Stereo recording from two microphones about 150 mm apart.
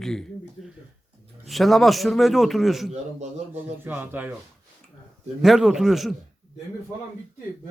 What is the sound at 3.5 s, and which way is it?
Speech, 15° right (ahead or behind).